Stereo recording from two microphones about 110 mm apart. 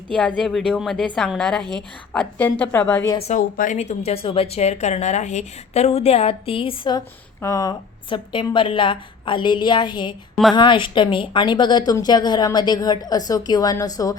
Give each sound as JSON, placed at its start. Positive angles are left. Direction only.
{"t": 0.3, "sound": "a woman's voice", "side_deg": 5}
{"t": 2.1, "sound": "a woman's voice", "side_deg": 15}
{"t": 3.3, "sound": "a woman's voice", "side_deg": 90}
{"t": 3.8, "sound": "speech", "side_deg": 75}
{"t": 7.4, "sound": "a woman's voice", "side_deg": 30}